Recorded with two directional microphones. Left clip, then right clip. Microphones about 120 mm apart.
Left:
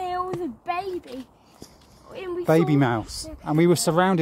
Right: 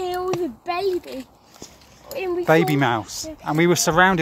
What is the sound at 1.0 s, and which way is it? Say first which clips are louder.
Speech: right 4 dB; 60° right (ahead or behind).